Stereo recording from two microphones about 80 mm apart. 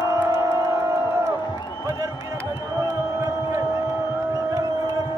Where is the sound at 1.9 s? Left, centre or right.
Right.